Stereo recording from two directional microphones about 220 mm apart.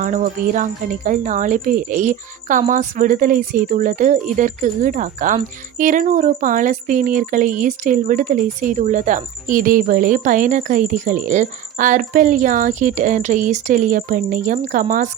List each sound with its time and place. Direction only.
0.0 s speech: 35° right (ahead or behind)